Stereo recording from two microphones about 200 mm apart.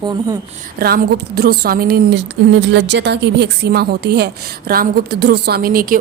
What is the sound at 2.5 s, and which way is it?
A woman's voice, 65° right (ahead or behind).